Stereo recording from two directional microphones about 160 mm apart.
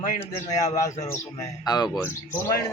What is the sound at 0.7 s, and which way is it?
Speech, 20° left (ahead or behind).